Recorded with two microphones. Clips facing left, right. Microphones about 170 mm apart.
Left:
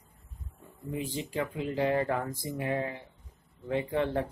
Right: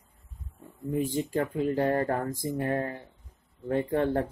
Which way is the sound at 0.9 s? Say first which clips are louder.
Right 5 dB; 45° right (ahead or behind).